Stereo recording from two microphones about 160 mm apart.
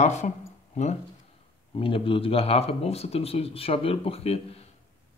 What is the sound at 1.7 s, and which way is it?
Speech, 35° left (ahead or behind).